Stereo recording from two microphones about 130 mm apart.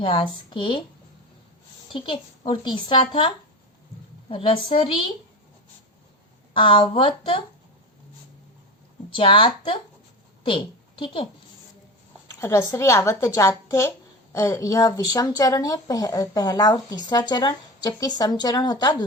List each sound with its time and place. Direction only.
0.0 s a woman's voice: 40° left (ahead or behind)
1.9 s a woman's voice: 40° left (ahead or behind)
6.5 s a woman's voice: 40° left (ahead or behind)
9.0 s a woman's voice: 40° left (ahead or behind)
12.4 s speech: 20° left (ahead or behind)